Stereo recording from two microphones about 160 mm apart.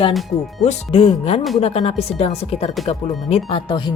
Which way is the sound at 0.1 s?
Centre (ahead or behind).